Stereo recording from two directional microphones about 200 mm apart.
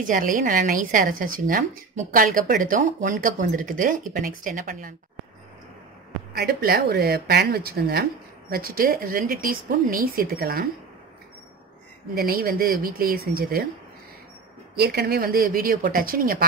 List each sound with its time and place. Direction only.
0.0 s a woman's voice: 40° right (ahead or behind)
6.3 s speech: 50° right (ahead or behind)
12.2 s speech: 50° right (ahead or behind)
14.8 s speech: 50° right (ahead or behind)